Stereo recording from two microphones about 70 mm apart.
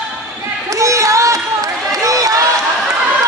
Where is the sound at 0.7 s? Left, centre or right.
Right.